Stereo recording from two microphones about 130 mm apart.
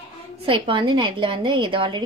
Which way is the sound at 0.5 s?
40° right (ahead or behind).